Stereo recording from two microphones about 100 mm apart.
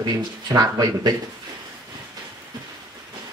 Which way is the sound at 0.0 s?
40° right (ahead or behind).